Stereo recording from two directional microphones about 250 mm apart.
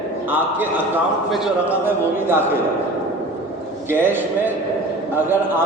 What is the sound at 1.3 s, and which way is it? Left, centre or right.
A man's voice, centre.